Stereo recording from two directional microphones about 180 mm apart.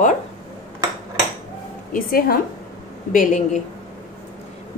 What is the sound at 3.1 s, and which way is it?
Speech, 45° left (ahead or behind).